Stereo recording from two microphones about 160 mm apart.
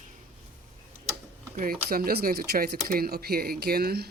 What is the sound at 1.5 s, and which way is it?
Speech, 65° right (ahead or behind).